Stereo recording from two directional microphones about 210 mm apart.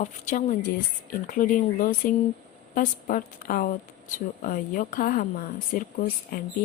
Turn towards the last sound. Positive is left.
turn(degrees=40)  # may be behind; listen again after turning